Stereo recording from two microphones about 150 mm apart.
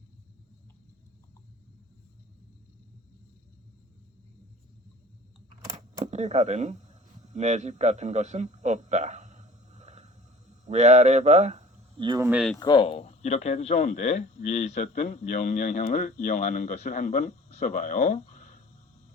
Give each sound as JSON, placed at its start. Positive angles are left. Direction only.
{"t": 6.0, "sound": "a man's voice", "side_deg": -50}
{"t": 11.9, "sound": "speech", "side_deg": -30}
{"t": 12.2, "sound": "speech", "side_deg": -10}
{"t": 12.5, "sound": "speech", "side_deg": 30}